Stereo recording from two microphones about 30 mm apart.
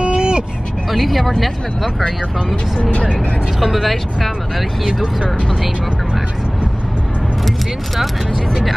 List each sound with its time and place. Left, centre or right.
0.0 s vehicle: right
0.9 s speech: centre
2.8 s speech: left
3.6 s speech: centre